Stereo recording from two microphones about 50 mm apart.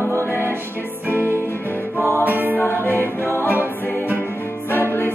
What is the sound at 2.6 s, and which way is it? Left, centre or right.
Music, left.